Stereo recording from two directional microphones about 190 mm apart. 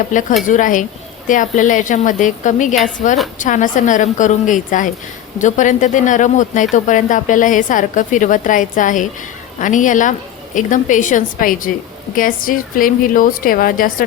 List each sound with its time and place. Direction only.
0.1 s a woman's voice: 45° left (ahead or behind)